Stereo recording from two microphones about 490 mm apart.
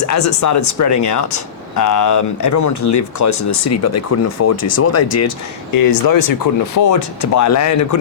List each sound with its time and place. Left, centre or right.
0.0 s speech: left
5.7 s speech: left